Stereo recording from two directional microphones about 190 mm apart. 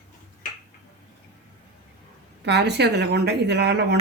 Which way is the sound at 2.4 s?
60° right (ahead or behind).